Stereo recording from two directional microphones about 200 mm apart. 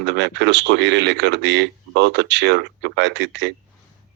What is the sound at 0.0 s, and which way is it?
A man's voice, 60° right (ahead or behind).